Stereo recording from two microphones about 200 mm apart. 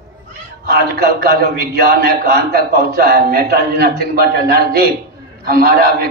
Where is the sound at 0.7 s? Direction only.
50° right (ahead or behind).